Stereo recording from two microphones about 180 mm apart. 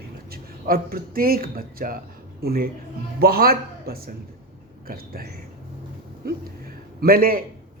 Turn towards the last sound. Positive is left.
turn(degrees=-55)  # may be behind; listen again after turning